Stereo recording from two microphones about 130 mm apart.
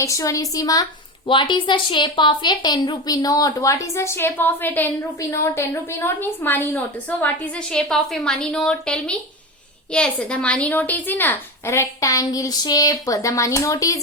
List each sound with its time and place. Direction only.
0.0 s speech: 25° left (ahead or behind)
1.3 s a woman's voice: 40° left (ahead or behind)